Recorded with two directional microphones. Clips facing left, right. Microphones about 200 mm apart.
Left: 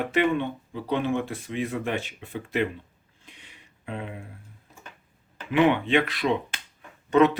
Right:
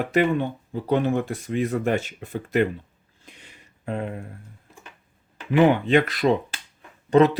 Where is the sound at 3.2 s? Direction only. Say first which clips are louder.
Right 3 dB; 45° right (ahead or behind).